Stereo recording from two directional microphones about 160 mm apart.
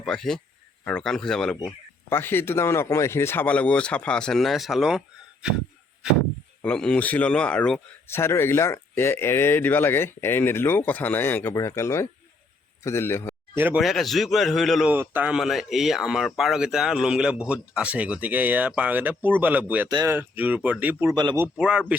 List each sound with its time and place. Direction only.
0.0 s a man's voice: 5° left (ahead or behind)
1.5 s speech: 15° left (ahead or behind); by 5.5 s 5° right (ahead or behind)
6.6 s a man's voice: 5° left (ahead or behind)
13.6 s speech: 10° right (ahead or behind)
13.8 s a man's voice: centre (ahead or behind)
19.9 s speech: 25° right (ahead or behind)
20.1 s speech: 10° right (ahead or behind)